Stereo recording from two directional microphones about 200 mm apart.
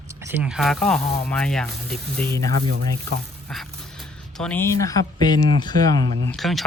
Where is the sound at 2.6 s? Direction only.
90° right.